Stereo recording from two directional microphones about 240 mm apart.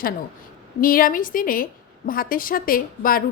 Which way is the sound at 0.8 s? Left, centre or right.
Left.